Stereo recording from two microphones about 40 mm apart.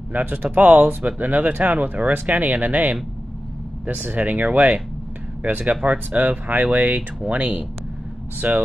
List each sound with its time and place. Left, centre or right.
0.1 s speech: right